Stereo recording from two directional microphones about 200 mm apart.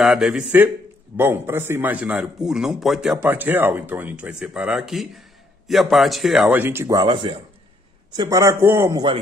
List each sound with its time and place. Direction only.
0.0 s a man's voice: centre (ahead or behind); by 9.2 s 20° right (ahead or behind)